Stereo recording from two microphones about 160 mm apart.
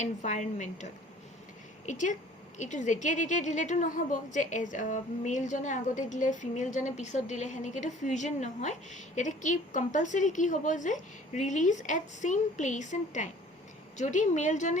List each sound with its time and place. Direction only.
0.0 s a woman's voice: 45° left (ahead or behind)
1.9 s a woman's voice: 50° left (ahead or behind)